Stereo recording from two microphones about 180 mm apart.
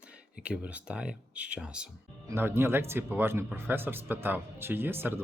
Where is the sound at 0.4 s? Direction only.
5° right (ahead or behind).